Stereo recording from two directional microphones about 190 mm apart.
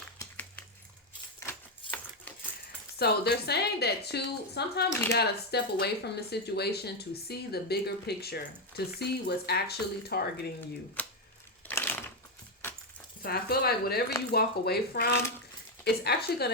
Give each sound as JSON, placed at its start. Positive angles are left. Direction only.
{"t": 1.4, "sound": "typewriter", "side_deg": 10}
{"t": 3.0, "sound": "speech", "side_deg": 60}
{"t": 11.7, "sound": "crushing", "side_deg": 10}
{"t": 13.2, "sound": "speech", "side_deg": 55}